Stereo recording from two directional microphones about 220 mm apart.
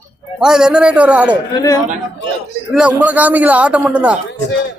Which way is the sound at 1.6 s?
15° left (ahead or behind).